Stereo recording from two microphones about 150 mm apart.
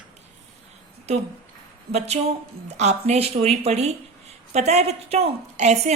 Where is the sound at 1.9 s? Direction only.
45° right (ahead or behind).